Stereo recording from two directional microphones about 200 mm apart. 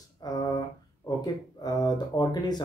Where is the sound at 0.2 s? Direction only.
20° left (ahead or behind).